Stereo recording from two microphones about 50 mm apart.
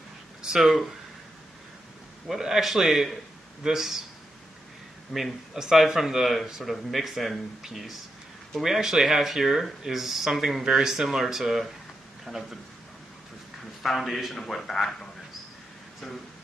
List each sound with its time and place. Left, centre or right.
0.4 s speech: centre
2.2 s speech: centre
5.1 s speech: centre
13.8 s speech: centre